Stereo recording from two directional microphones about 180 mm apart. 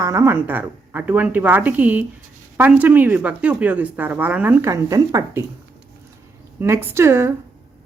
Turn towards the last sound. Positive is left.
turn(degrees=-15)  # may be behind; listen again after turning